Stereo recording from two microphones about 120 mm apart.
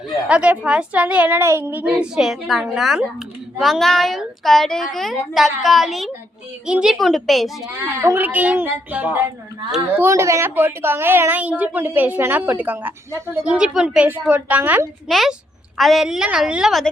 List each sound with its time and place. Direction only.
0.1 s a woman's voice: 10° right (ahead or behind)
7.8 s a woman's voice: 20° right (ahead or behind)
10.0 s a woman's voice: 25° right (ahead or behind)
13.4 s a woman's voice: 5° right (ahead or behind)
15.0 s a woman's voice: centre (ahead or behind)